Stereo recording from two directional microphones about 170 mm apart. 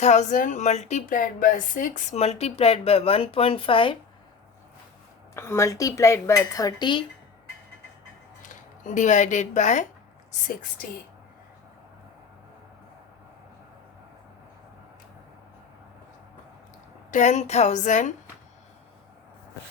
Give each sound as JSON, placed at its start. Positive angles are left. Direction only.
{"t": 0.0, "sound": "a woman's voice", "side_deg": 45}
{"t": 5.3, "sound": "a woman's voice", "side_deg": 15}
{"t": 8.4, "sound": "a woman's voice", "side_deg": 50}
{"t": 17.1, "sound": "a woman's voice", "side_deg": 45}